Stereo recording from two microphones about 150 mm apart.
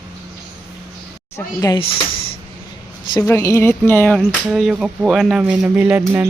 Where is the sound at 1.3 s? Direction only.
20° left (ahead or behind).